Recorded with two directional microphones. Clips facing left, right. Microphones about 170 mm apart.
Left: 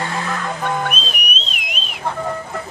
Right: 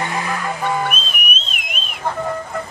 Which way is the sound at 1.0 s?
50° right (ahead or behind).